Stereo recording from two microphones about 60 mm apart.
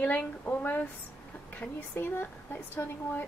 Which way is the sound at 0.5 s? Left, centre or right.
Left.